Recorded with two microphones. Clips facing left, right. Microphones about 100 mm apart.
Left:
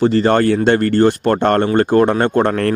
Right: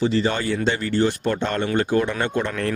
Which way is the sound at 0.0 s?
55° left (ahead or behind).